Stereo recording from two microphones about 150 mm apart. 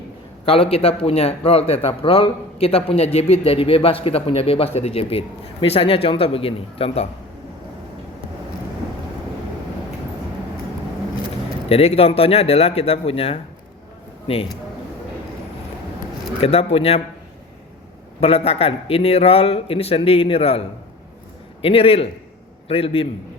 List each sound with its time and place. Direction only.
0.4 s a man's voice: 40° left (ahead or behind)
11.7 s a man's voice: 45° left (ahead or behind)
16.4 s a man's voice: 40° left (ahead or behind)
18.2 s a man's voice: 40° left (ahead or behind)